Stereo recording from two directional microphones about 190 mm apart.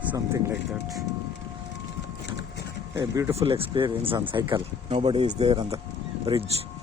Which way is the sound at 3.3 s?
30° right (ahead or behind).